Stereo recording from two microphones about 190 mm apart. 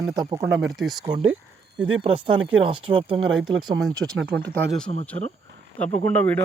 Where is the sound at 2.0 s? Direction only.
30° right (ahead or behind).